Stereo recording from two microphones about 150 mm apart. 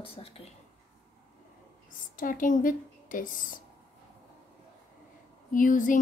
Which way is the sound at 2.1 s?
65° left (ahead or behind).